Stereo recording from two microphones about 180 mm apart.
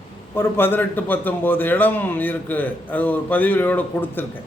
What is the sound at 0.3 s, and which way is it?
A man's voice, 10° left (ahead or behind).